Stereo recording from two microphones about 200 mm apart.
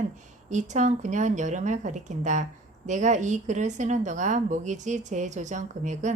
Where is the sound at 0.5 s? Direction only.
35° right (ahead or behind).